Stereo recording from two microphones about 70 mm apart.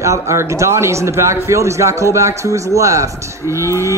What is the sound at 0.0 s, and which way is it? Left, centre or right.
A man's voice, right.